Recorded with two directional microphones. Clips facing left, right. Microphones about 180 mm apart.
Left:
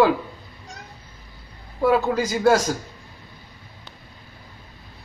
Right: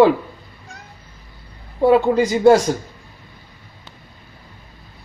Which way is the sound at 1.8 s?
30° right (ahead or behind).